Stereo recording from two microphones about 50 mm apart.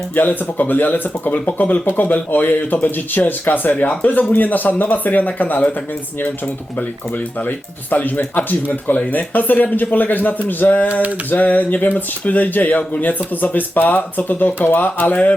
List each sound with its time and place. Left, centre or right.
0.2 s speech: left
7.4 s speech: left